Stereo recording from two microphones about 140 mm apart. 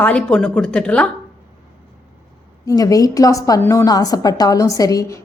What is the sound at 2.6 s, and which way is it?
A woman's voice, 25° left (ahead or behind).